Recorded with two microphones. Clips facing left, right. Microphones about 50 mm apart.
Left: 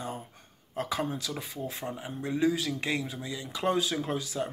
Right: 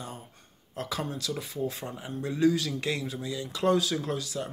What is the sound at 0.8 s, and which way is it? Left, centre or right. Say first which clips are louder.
Speech: even; centre.